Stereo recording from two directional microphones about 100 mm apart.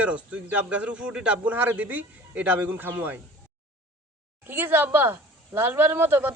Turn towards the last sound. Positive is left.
turn(degrees=-20)  # may be behind; listen again after turning